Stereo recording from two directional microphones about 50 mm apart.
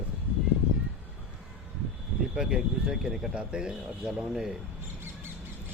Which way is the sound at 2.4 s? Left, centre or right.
Centre.